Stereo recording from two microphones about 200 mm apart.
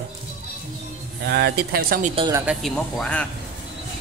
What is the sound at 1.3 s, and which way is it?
Speech, 55° right (ahead or behind).